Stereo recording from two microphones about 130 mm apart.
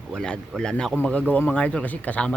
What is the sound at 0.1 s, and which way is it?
A man's voice, 5° left (ahead or behind).